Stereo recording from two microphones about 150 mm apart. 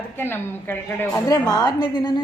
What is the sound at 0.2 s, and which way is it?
A woman's voice, 15° left (ahead or behind).